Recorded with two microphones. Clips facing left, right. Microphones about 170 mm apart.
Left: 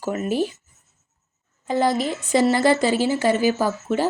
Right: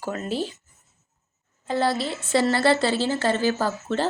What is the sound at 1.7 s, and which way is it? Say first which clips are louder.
A woman's voice: left 3 dB; 15° left (ahead or behind).